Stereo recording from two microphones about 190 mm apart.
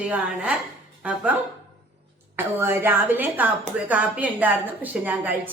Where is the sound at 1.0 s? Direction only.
5° right (ahead or behind).